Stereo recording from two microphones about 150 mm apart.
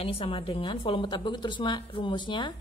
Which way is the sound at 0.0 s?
40° left (ahead or behind).